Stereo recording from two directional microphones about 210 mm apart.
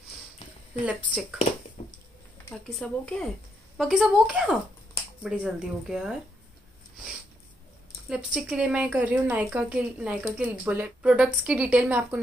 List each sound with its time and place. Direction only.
0.8 s speech: 5° right (ahead or behind)
1.8 s a sound: 25° left (ahead or behind)
2.5 s speech: 5° left (ahead or behind)
8.1 s a woman's voice: 5° right (ahead or behind)